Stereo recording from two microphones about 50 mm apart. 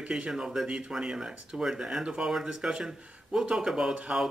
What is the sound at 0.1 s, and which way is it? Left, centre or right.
Speech, centre.